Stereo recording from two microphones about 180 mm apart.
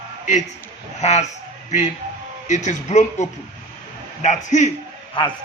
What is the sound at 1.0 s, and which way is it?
Speech, 40° left (ahead or behind).